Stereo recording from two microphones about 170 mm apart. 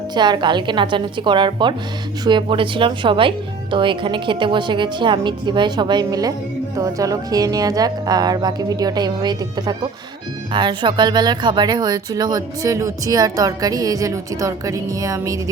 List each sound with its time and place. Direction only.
0.1 s speech: 25° right (ahead or behind)